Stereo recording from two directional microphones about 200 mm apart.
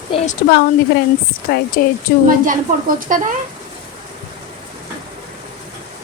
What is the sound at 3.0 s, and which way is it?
Speech, 40° right (ahead or behind).